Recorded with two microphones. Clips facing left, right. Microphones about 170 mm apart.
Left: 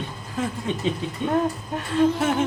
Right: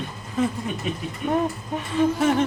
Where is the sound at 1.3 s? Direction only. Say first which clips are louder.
Even; centre (ahead or behind).